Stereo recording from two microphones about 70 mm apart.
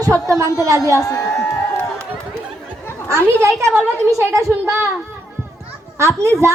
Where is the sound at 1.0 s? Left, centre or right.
Left.